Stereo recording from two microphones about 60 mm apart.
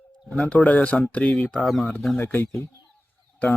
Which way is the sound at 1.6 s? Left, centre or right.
Centre.